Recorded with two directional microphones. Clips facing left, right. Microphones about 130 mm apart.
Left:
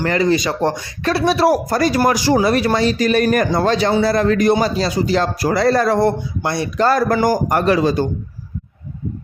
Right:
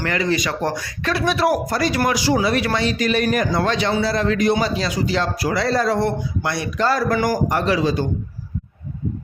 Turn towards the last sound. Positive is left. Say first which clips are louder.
# left 4 dB
turn(degrees=50)  # may be behind; listen again after turning